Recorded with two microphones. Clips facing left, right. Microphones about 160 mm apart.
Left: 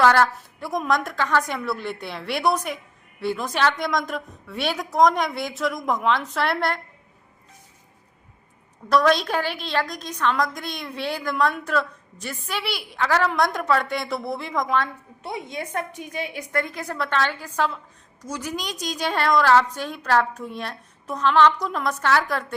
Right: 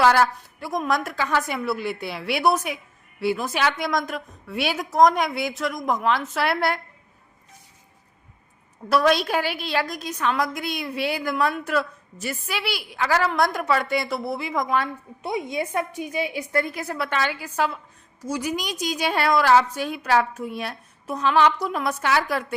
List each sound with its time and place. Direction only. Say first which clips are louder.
0.0 s a woman's voice: even; 10° right (ahead or behind)
8.9 s a woman's voice: even; 10° right (ahead or behind)